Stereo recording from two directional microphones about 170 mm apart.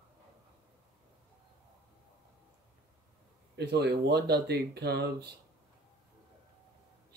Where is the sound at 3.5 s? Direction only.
75° right (ahead or behind).